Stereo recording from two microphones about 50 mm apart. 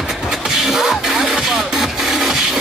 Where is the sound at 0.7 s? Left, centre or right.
Centre.